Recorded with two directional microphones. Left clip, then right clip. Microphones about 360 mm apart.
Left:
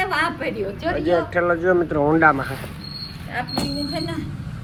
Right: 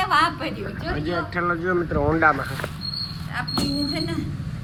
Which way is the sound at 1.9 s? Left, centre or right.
Left.